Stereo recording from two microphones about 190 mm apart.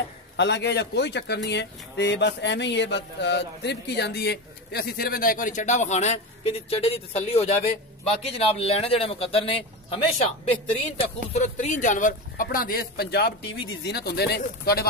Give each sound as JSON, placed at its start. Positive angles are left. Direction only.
{"t": 0.4, "sound": "a man's voice", "side_deg": 65}